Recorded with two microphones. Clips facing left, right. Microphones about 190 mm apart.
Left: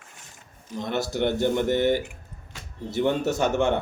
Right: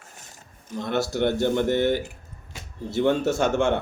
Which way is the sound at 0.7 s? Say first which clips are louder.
Right 2 dB; 15° left (ahead or behind).